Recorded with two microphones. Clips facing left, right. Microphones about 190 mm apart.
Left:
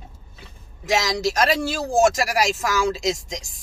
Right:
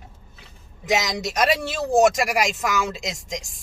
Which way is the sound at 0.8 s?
Centre (ahead or behind).